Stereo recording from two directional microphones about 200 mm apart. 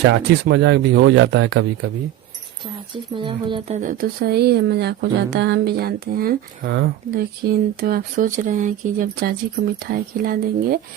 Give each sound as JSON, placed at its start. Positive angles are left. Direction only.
{"t": 0.0, "sound": "speech", "side_deg": -65}
{"t": 2.9, "sound": "speech", "side_deg": -25}
{"t": 3.8, "sound": "speech", "side_deg": -45}